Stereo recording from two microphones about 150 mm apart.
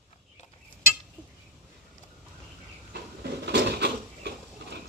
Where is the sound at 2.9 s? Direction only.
90° right.